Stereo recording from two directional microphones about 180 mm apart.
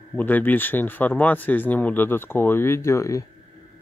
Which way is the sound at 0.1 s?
10° left (ahead or behind).